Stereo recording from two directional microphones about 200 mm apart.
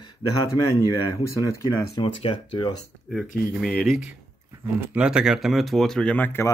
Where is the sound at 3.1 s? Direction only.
5° left (ahead or behind).